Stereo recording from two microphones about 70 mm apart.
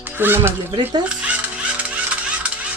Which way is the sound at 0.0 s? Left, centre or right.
Right.